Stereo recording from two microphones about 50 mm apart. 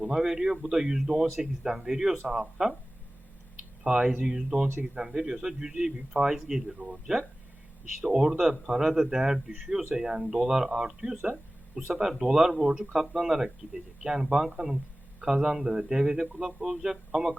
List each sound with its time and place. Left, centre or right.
0.0 s a man's voice: centre
3.8 s a man's voice: right
6.7 s speech: centre
8.1 s a man's voice: centre